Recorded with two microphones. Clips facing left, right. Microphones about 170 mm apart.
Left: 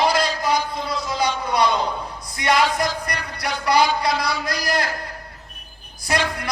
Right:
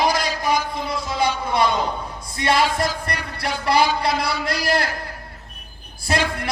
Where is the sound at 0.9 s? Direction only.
25° right (ahead or behind).